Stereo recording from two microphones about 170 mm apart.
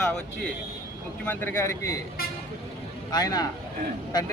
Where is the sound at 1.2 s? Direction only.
10° left (ahead or behind).